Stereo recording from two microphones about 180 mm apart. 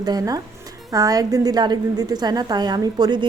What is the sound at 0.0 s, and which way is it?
A woman's voice, 20° right (ahead or behind).